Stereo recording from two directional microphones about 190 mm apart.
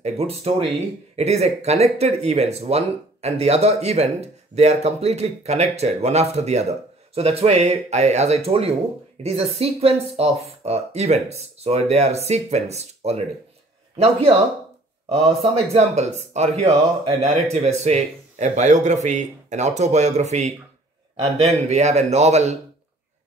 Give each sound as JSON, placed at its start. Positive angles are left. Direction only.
{"t": 0.0, "sound": "speech", "side_deg": -35}